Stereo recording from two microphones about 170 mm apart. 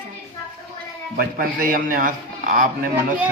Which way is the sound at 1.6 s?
55° right (ahead or behind).